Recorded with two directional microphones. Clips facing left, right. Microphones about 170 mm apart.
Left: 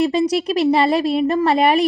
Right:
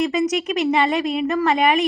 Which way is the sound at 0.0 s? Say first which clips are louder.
Left 3 dB; 30° left (ahead or behind).